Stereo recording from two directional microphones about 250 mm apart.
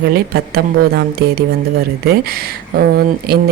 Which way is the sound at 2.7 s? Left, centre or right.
Right.